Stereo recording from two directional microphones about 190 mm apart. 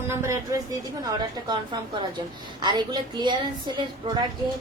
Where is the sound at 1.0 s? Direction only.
20° right (ahead or behind).